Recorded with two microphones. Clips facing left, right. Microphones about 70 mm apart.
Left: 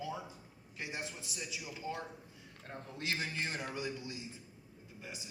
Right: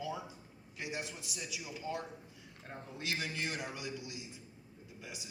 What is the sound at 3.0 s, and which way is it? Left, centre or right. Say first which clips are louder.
A man's voice: even; left.